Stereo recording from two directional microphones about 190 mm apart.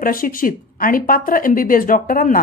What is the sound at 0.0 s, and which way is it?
Speech, 50° left (ahead or behind).